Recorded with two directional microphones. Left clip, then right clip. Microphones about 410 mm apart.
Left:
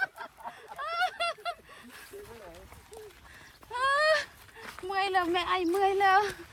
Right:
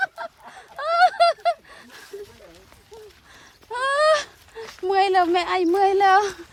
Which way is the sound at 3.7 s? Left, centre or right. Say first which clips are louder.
Right 7 dB; centre.